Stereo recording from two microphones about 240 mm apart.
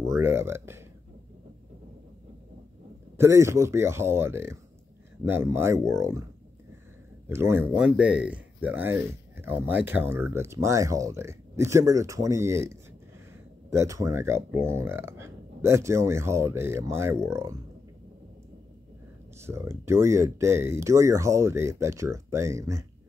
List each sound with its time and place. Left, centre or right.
0.0 s speech: centre
3.2 s speech: centre
7.2 s speech: centre
19.4 s speech: centre